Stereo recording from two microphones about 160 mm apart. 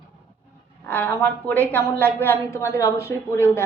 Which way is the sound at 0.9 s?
10° left (ahead or behind).